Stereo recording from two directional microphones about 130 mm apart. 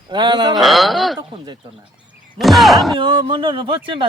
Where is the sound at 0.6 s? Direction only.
Centre (ahead or behind).